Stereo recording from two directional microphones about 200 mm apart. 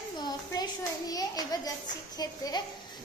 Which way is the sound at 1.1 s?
20° left (ahead or behind).